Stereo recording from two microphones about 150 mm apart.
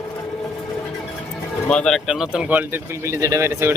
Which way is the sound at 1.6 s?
5° left (ahead or behind).